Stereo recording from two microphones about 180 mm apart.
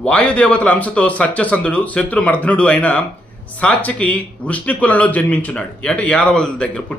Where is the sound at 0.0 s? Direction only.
5° left (ahead or behind).